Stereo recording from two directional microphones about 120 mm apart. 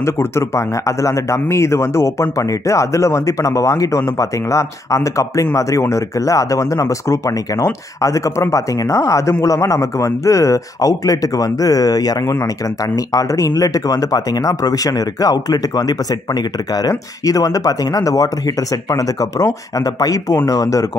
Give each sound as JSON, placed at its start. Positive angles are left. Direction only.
{"t": 0.0, "sound": "speech", "side_deg": 20}